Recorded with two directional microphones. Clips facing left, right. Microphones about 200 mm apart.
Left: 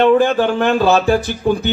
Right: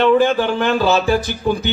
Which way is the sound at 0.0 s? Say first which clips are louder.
Left 2 dB; 50° left (ahead or behind).